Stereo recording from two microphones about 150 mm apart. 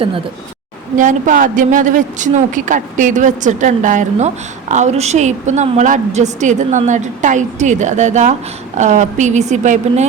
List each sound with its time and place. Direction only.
0.9 s a woman's voice: 60° right (ahead or behind)